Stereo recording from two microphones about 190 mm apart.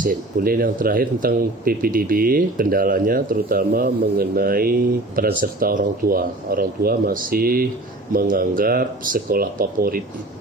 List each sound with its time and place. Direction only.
0.0 s speech: 45° right (ahead or behind)